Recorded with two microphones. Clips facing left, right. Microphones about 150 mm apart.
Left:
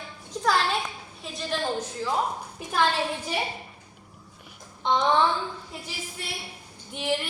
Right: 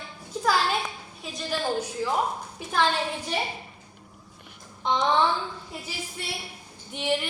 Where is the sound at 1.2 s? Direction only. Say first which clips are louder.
Even; centre (ahead or behind).